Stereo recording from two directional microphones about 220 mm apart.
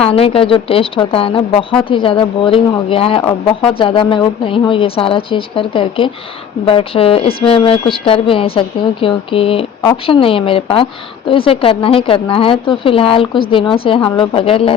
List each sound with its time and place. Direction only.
0.1 s speech: 25° left (ahead or behind)